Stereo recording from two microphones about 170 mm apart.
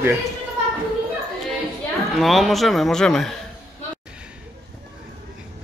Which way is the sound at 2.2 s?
Centre (ahead or behind).